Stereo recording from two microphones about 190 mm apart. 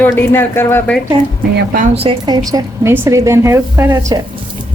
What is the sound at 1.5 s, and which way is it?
Speech, 50° right (ahead or behind).